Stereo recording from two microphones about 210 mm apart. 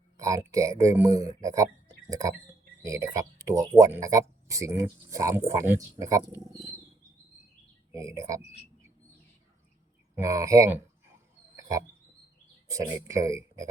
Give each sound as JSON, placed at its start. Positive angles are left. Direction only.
{"t": 0.2, "sound": "speech", "side_deg": -15}
{"t": 7.9, "sound": "speech", "side_deg": -15}
{"t": 10.2, "sound": "speech", "side_deg": -15}
{"t": 12.6, "sound": "speech", "side_deg": -15}